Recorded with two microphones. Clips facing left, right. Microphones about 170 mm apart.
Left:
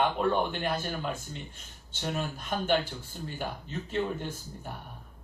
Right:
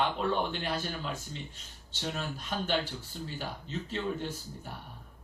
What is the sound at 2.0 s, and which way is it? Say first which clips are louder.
A man's voice: left 3 dB; 50° left (ahead or behind).